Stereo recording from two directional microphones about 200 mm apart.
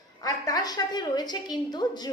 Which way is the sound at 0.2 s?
20° left (ahead or behind).